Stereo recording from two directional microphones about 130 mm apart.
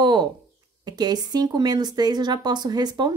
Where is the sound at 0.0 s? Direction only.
35° right (ahead or behind).